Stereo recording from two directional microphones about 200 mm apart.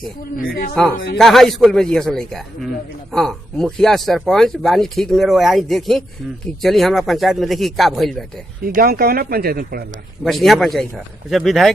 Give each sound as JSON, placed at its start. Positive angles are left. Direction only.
{"t": 0.3, "sound": "speech", "side_deg": 45}
{"t": 1.2, "sound": "speech", "side_deg": 0}
{"t": 8.6, "sound": "speech", "side_deg": -45}
{"t": 10.2, "sound": "speech", "side_deg": 0}